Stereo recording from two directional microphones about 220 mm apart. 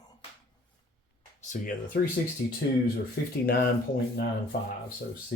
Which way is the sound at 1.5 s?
40° left (ahead or behind).